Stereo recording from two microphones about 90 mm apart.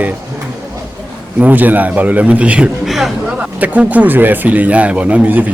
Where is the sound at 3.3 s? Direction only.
15° right (ahead or behind).